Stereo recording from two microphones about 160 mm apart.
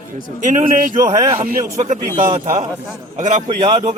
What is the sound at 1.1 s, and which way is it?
Speech, 25° right (ahead or behind).